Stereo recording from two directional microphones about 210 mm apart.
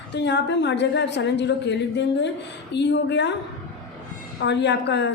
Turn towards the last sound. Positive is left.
turn(degrees=55)  # may be behind; listen again after turning